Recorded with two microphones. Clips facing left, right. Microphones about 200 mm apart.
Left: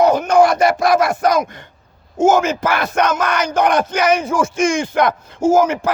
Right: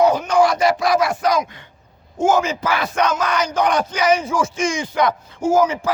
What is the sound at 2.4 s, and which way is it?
Speech, 75° left (ahead or behind).